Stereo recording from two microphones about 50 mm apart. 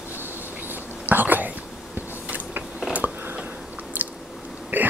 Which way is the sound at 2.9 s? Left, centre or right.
Right.